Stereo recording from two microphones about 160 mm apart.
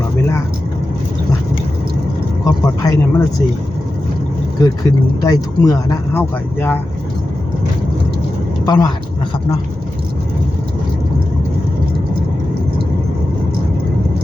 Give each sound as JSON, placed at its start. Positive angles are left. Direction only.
{"t": 2.4, "sound": "speech", "side_deg": 20}
{"t": 4.6, "sound": "speech", "side_deg": 25}
{"t": 8.6, "sound": "speech", "side_deg": 25}